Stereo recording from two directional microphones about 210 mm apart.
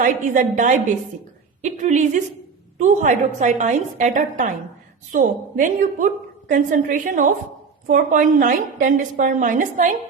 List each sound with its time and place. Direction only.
0.0 s a woman's voice: 35° right (ahead or behind)